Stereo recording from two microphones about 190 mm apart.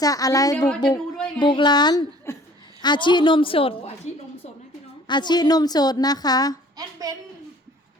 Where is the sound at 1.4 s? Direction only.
25° left (ahead or behind).